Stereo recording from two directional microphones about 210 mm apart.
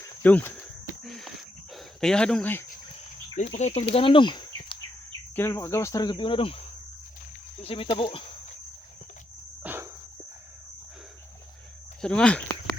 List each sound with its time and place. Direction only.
0.2 s speech: 10° left (ahead or behind)
1.0 s cricket: centre (ahead or behind)
1.7 s speech: 5° left (ahead or behind)
3.5 s speech: 30° left (ahead or behind)
5.3 s cricket: 10° left (ahead or behind)
7.6 s speech: 25° left (ahead or behind)
9.6 s dog: 10° right (ahead or behind)
12.0 s speech: 5° left (ahead or behind)